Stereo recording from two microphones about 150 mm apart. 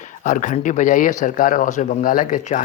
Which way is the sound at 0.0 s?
55° left (ahead or behind).